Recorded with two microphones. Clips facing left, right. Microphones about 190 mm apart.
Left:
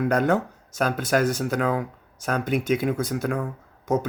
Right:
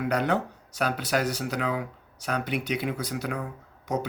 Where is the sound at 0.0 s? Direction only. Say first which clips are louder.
Left 4 dB; 45° left (ahead or behind).